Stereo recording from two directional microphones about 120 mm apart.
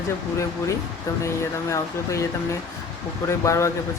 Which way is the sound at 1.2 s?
25° left (ahead or behind).